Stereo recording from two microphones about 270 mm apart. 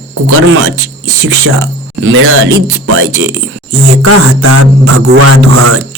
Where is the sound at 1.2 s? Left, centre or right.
Right.